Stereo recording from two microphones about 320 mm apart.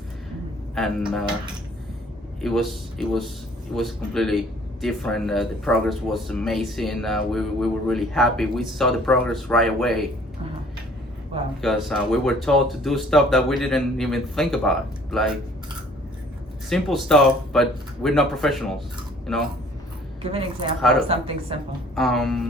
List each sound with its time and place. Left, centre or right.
0.8 s speech: centre
2.4 s speech: centre
11.6 s speech: centre
16.6 s speech: centre
20.2 s speech: centre
21.9 s speech: centre